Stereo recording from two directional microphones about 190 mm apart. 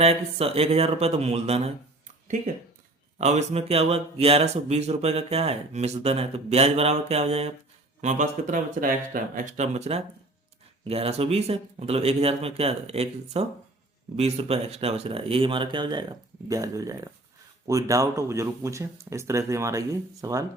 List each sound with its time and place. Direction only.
0.0 s speech: 30° right (ahead or behind); by 20.4 s 15° right (ahead or behind)